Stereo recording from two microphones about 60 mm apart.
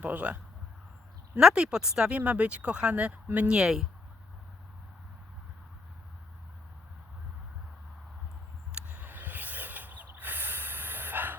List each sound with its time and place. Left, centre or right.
0.0 s speech: right
1.4 s speech: centre
3.6 s speech: centre
8.9 s snort: right